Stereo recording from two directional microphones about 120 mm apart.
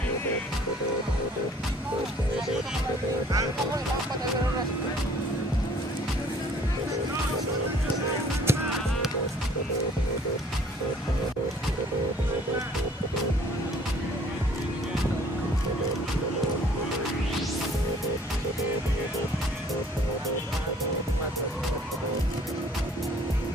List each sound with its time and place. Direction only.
8.5 s music: 20° right (ahead or behind)